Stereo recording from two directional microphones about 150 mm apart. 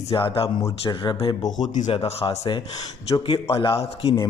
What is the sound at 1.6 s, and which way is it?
Speech, 55° left (ahead or behind).